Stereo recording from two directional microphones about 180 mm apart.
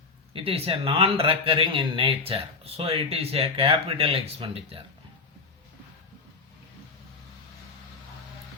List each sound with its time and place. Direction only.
0.3 s speech: 35° right (ahead or behind)